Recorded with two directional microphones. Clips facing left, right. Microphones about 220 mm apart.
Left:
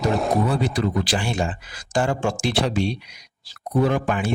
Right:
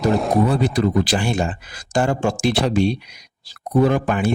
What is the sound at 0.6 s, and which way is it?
Speech, 45° right (ahead or behind).